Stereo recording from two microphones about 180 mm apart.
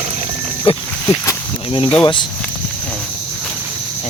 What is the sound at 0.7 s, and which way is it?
Speech, 30° left (ahead or behind).